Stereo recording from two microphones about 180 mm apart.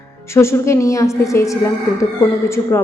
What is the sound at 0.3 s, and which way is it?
A woman's voice, 15° left (ahead or behind).